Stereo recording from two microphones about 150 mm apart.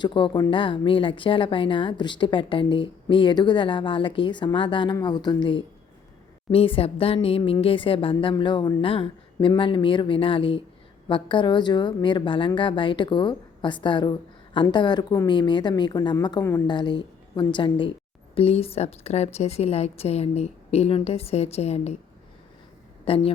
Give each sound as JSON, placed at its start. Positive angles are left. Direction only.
{"t": 0.0, "sound": "a woman's voice", "side_deg": 30}
{"t": 16.6, "sound": "a woman's voice", "side_deg": 30}
{"t": 23.0, "sound": "a woman's voice", "side_deg": 40}